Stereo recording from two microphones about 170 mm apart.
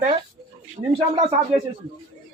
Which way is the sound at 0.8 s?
30° right (ahead or behind).